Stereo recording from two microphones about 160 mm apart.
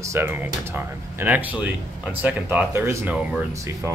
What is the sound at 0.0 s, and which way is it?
Speech, 15° right (ahead or behind).